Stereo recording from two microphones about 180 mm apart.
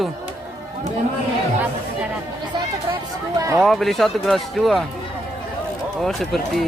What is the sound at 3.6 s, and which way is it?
Speech, centre (ahead or behind).